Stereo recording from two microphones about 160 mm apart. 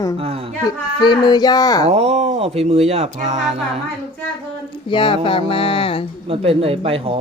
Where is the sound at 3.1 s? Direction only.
45° right (ahead or behind).